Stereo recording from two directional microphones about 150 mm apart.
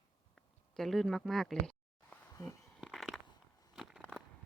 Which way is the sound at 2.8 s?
Centre (ahead or behind).